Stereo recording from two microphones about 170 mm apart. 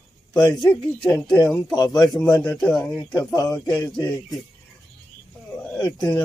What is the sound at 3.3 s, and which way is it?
Speech, 20° left (ahead or behind).